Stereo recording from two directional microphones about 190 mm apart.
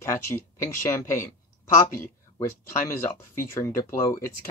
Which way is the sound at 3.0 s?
15° left (ahead or behind).